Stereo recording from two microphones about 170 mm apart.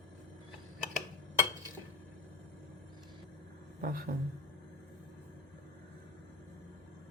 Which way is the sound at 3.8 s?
60° right (ahead or behind).